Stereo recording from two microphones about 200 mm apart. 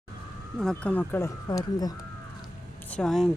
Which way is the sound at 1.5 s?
20° left (ahead or behind).